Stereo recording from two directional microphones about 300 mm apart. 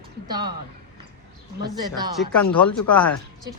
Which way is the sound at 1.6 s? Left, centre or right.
Centre.